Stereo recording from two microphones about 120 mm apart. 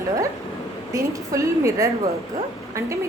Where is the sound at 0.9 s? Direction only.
25° right (ahead or behind).